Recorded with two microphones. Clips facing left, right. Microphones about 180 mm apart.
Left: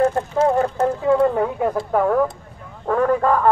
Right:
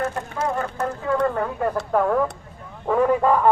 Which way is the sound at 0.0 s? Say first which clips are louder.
Left 8 dB; 30° left (ahead or behind).